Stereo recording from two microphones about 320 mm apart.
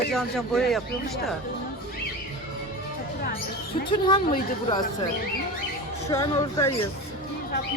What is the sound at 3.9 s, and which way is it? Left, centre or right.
A woman's voice, centre.